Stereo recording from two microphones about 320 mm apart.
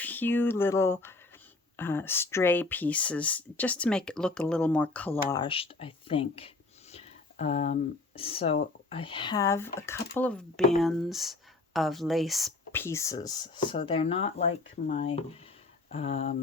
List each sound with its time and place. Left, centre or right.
0.0 s speech: centre